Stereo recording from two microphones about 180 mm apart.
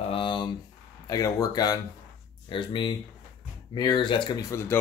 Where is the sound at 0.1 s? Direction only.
25° left (ahead or behind).